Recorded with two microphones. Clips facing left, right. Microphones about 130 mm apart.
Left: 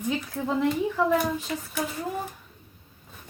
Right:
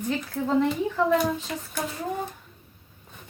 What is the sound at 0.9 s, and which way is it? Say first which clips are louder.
Speech: right 1 dB; 5° left (ahead or behind).